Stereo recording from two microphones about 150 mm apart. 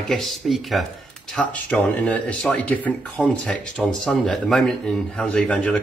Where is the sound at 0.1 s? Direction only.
Centre (ahead or behind).